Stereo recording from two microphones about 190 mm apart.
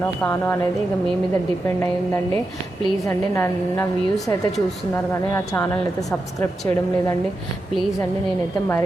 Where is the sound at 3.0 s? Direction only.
15° left (ahead or behind).